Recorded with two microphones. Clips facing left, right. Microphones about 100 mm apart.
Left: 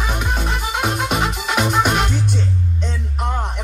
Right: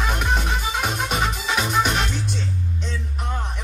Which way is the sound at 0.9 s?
55° left (ahead or behind).